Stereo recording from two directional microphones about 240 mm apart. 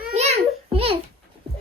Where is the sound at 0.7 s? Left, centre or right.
Right.